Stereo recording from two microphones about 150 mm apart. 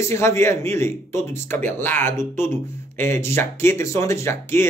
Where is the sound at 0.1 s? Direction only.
20° left (ahead or behind).